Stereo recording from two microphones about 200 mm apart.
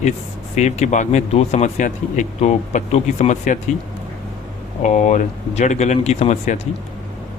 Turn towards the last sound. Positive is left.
turn(degrees=35)  # may be behind; listen again after turning